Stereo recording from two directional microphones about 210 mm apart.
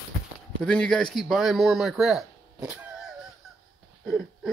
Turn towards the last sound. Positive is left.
turn(degrees=-5)  # may be behind; listen again after turning